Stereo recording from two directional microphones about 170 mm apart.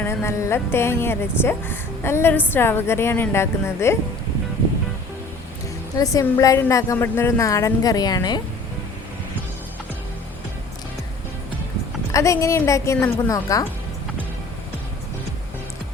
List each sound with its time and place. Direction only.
0.0 s speech: 15° left (ahead or behind)
6.0 s a woman's voice: 20° left (ahead or behind)
12.1 s speech: 20° left (ahead or behind)